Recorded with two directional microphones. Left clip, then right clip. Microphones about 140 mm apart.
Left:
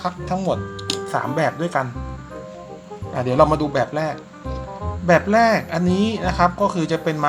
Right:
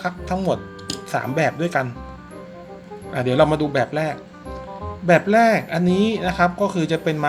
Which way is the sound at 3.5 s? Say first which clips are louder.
Left 1 dB; 10° right (ahead or behind).